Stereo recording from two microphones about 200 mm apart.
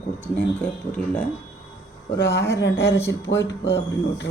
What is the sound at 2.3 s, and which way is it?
Speech, 15° left (ahead or behind).